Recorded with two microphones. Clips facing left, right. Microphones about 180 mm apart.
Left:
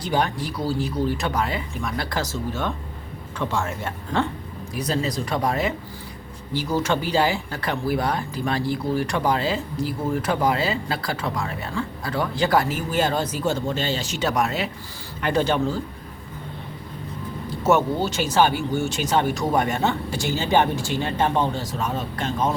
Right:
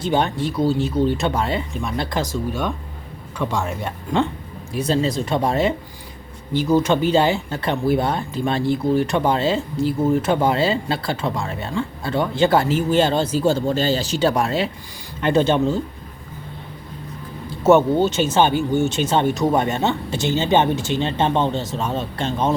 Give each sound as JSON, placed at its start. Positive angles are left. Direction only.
{"t": 0.0, "sound": "speech", "side_deg": -25}
{"t": 4.7, "sound": "speech", "side_deg": -25}
{"t": 17.6, "sound": "speech", "side_deg": -25}